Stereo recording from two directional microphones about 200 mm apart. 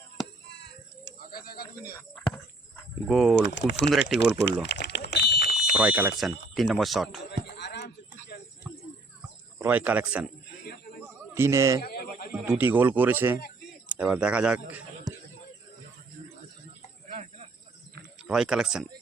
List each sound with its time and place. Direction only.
0.4 s bird: 60° left (ahead or behind)
3.1 s speech: centre (ahead or behind)
3.4 s speech: 60° left (ahead or behind)
4.2 s smoke detector: 60° left (ahead or behind)
5.7 s speech: 5° right (ahead or behind)
7.3 s a sound: 55° left (ahead or behind)
9.6 s speech: 10° right (ahead or behind)
10.6 s a sound: 50° left (ahead or behind)
11.3 s speech: 15° right (ahead or behind)
11.8 s a sound: 50° left (ahead or behind)
12.3 s speech: 10° right (ahead or behind)
15.1 s a sound: 20° right (ahead or behind)
17.1 s cricket: 35° right (ahead or behind)
18.2 s speech: 5° right (ahead or behind)